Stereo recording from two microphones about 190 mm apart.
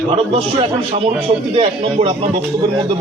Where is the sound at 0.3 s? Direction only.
30° right (ahead or behind).